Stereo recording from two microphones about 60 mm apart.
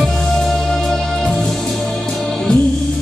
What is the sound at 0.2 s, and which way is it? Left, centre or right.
Music, centre.